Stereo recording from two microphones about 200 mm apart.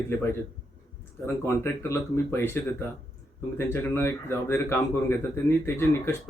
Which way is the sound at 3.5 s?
15° left (ahead or behind).